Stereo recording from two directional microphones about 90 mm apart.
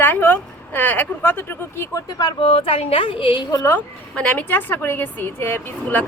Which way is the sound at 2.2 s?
60° left (ahead or behind).